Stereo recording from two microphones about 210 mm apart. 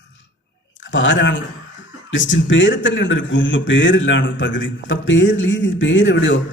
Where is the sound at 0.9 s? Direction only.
60° left (ahead or behind).